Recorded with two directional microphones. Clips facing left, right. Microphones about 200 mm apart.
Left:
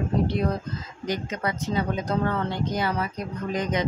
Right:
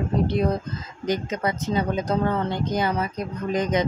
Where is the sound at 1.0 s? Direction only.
20° right (ahead or behind).